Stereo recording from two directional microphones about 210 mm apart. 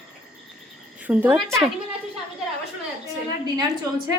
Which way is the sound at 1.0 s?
10° right (ahead or behind).